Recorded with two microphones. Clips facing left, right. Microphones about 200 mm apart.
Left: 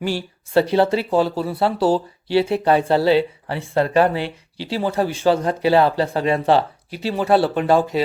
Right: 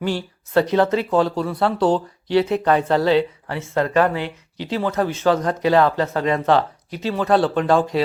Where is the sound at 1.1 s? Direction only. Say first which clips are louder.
Even; 5° left (ahead or behind).